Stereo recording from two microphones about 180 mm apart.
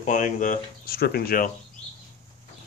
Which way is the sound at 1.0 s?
60° left (ahead or behind).